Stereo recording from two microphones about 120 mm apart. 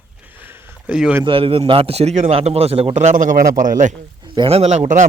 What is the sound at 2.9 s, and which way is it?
A man's voice, 85° right.